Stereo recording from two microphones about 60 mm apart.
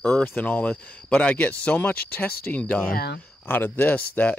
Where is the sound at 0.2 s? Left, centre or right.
Left.